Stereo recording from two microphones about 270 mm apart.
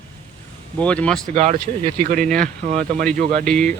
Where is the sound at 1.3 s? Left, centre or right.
Right.